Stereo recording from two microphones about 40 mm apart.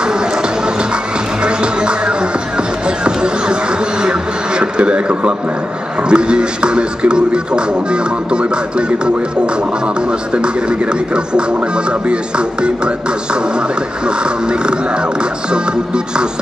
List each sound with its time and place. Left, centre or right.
1.4 s music: right
4.0 s a sound: right
6.0 s speech: right
10.3 s speech: right
12.1 s speech: right